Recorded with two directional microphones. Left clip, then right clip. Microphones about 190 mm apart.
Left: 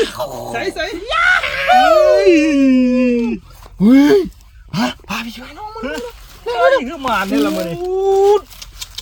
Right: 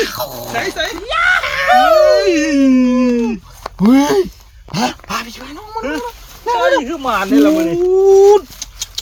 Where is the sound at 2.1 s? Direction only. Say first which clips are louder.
Left 1 dB; 15° right (ahead or behind).